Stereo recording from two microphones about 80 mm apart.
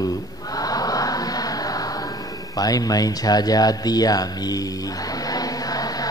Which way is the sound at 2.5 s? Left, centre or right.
Left.